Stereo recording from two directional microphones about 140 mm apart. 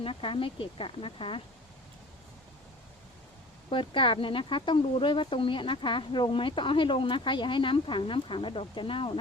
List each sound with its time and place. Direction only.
0.0 s speech: 40° left (ahead or behind)
3.7 s speech: 35° left (ahead or behind)